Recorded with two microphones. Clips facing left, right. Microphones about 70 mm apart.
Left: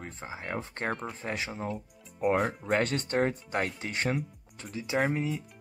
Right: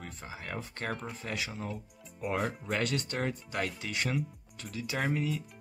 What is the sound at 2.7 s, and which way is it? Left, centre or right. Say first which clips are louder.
Speech: left 6 dB; left.